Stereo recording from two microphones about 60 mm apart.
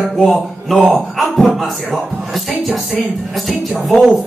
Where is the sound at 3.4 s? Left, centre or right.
Centre.